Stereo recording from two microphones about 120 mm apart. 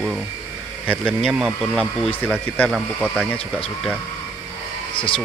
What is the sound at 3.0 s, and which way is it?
Speech, 5° left (ahead or behind).